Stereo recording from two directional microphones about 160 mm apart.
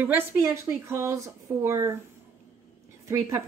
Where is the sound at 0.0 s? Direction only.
10° right (ahead or behind).